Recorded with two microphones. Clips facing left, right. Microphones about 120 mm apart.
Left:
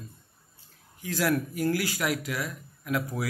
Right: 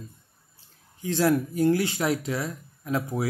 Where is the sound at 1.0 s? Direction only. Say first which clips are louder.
Right 4 dB; 25° right (ahead or behind).